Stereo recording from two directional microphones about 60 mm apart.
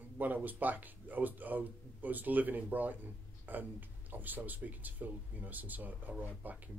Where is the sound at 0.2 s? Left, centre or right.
Right.